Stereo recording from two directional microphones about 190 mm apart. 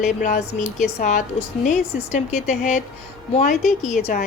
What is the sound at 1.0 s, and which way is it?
A woman's voice, 40° left (ahead or behind).